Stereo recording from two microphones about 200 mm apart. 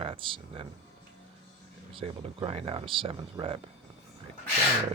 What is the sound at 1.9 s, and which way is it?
Speech, 30° right (ahead or behind).